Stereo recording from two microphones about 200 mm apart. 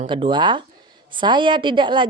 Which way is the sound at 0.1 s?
25° right (ahead or behind).